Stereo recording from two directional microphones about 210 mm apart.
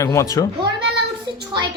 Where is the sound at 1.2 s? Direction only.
20° right (ahead or behind).